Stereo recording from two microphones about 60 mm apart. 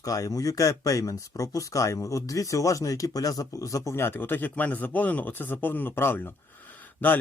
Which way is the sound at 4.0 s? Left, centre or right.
Left.